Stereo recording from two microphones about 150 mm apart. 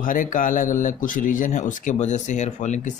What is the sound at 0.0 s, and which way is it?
Speech, 65° left (ahead or behind).